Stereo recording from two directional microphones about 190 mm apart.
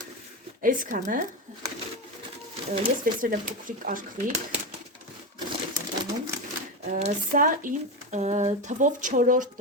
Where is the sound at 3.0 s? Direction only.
45° right (ahead or behind).